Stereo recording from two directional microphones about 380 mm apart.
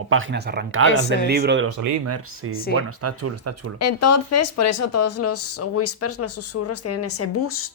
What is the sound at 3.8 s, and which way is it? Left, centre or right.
Speech, left.